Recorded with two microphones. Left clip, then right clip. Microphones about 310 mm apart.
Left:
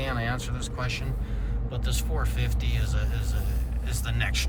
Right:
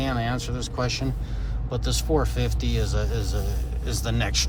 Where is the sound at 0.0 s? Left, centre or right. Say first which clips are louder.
Right 3 dB; centre.